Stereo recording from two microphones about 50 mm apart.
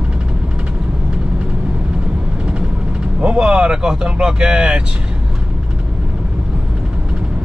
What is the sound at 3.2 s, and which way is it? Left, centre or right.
Speech, right.